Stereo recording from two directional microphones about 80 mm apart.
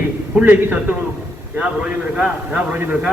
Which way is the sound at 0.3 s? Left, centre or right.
Centre.